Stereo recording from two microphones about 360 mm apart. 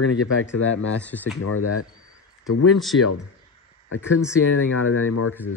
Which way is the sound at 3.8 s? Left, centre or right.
Left.